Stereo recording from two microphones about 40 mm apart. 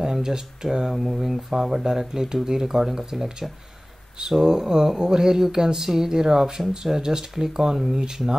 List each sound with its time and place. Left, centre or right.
0.0 s speech: centre